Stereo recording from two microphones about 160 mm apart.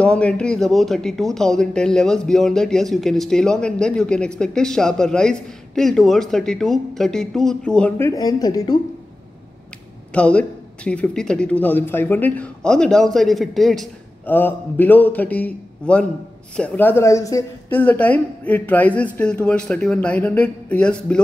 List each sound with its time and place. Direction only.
0.0 s speech: 5° left (ahead or behind)
8.1 s speech: 25° left (ahead or behind)
10.1 s speech: 5° left (ahead or behind)
17.6 s speech: 10° left (ahead or behind)